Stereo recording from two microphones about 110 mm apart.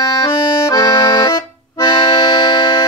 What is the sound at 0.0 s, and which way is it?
Accordion, 35° left (ahead or behind).